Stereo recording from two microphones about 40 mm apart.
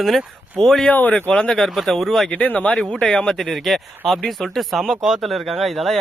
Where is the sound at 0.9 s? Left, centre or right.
Left.